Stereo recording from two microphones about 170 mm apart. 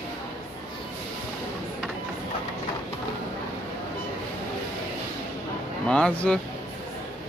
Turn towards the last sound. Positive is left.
turn(degrees=5)  # may be behind; listen again after turning